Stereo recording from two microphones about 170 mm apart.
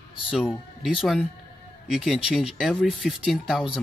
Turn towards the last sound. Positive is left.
turn(degrees=0)  # may be behind; listen again after turning